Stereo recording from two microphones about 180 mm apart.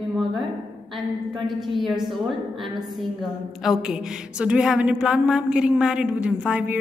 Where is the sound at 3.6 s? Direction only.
Centre (ahead or behind).